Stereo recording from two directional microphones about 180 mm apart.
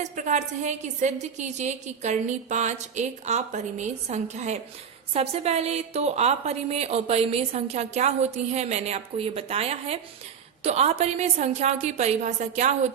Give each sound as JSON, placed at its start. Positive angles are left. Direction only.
{"t": 0.0, "sound": "a woman's voice", "side_deg": -40}